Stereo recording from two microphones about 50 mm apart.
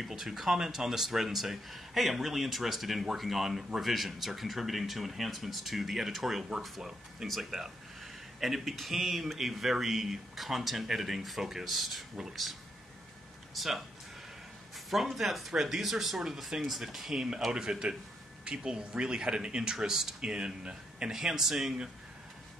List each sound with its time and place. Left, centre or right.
0.0 s speech: centre
13.6 s speech: centre
14.9 s speech: centre
21.1 s speech: centre